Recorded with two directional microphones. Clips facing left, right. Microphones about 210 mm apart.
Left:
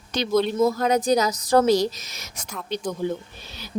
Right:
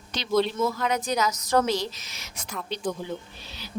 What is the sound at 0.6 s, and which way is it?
Speech, 35° left (ahead or behind).